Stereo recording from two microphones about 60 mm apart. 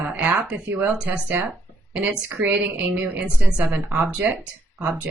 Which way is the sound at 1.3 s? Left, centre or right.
Right.